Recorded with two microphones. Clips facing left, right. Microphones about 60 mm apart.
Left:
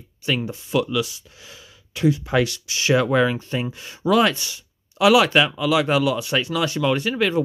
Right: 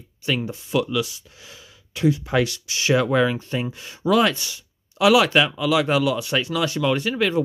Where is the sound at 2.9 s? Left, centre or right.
Left.